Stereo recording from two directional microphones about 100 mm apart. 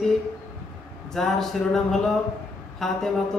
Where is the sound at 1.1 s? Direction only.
5° left (ahead or behind).